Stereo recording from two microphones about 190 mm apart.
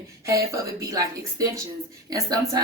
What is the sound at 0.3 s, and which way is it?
A woman's voice, 15° right (ahead or behind).